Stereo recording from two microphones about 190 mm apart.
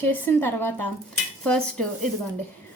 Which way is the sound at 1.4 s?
5° left (ahead or behind).